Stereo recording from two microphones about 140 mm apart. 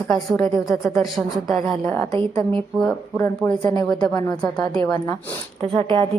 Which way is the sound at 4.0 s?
30° left (ahead or behind).